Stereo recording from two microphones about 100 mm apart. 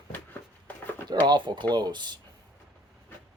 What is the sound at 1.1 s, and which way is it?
Speech, 45° right (ahead or behind).